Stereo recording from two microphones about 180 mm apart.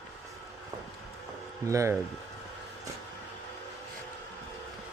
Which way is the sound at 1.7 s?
15° right (ahead or behind).